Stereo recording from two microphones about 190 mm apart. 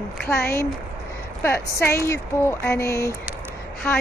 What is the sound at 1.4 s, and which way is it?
Speech, 10° left (ahead or behind).